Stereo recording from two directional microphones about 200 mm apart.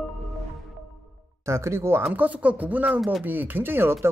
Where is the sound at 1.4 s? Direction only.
15° right (ahead or behind).